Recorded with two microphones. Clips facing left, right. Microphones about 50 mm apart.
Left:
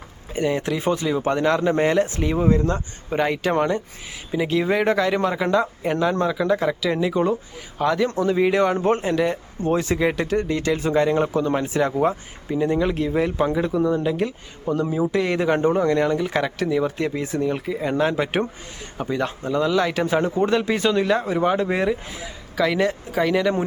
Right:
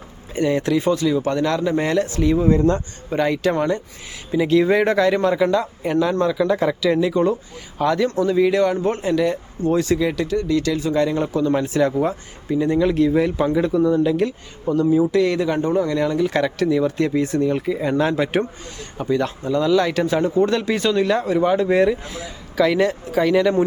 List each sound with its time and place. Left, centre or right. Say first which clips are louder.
0.3 s speech: right 4 dB; centre
0.9 s speech: right 2 dB; left; by 8.0 s centre
8.0 s speech: right 3 dB; centre
15.1 s speech: right 2 dB; left
16.0 s speech: right 2 dB; centre